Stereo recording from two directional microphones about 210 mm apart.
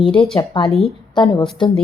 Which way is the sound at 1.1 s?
20° left (ahead or behind).